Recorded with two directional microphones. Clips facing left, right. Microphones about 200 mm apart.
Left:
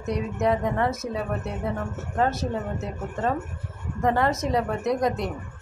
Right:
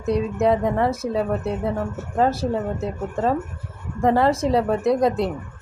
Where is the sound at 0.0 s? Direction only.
30° right (ahead or behind).